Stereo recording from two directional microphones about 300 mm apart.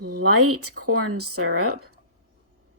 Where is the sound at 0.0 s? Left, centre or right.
Right.